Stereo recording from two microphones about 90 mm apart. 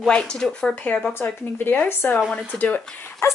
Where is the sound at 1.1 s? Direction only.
25° left (ahead or behind).